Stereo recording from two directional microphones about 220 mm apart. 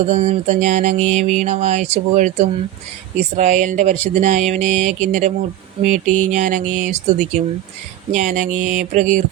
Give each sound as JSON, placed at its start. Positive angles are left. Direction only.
{"t": 0.1, "sound": "music", "side_deg": -30}